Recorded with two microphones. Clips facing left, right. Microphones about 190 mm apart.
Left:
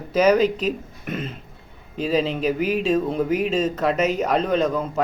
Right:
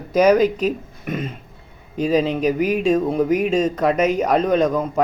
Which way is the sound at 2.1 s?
45° right (ahead or behind).